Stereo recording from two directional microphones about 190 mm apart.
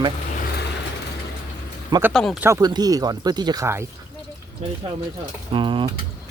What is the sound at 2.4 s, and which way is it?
Speech, 15° right (ahead or behind).